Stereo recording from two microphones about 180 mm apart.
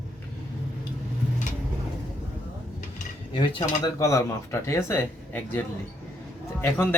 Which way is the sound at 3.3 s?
30° left (ahead or behind).